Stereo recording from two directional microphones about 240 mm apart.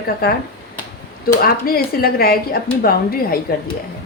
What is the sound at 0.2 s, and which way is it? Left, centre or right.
A woman's voice, left.